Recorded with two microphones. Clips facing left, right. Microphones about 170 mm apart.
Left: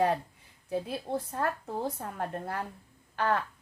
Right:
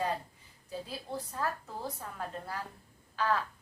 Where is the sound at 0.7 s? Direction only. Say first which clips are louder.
Left 7 dB; 60° left (ahead or behind).